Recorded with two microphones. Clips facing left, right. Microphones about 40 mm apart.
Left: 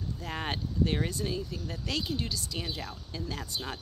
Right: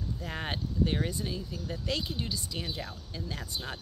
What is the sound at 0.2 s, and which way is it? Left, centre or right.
Speech, centre.